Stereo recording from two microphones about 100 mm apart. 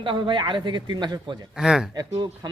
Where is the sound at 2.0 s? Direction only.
45° right (ahead or behind).